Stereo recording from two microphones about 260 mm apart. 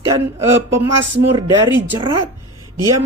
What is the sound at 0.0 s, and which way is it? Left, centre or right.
A man's voice, centre.